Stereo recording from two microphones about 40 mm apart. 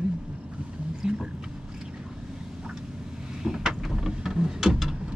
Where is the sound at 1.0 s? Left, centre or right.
Right.